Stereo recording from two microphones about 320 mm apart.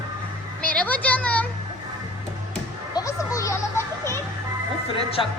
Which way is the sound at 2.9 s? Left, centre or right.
Centre.